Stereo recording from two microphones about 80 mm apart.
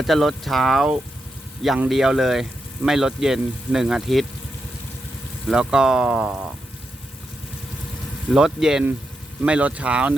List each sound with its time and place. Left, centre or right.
0.0 s speech: centre
1.9 s speech: centre
5.5 s speech: centre
8.3 s speech: centre
9.5 s speech: centre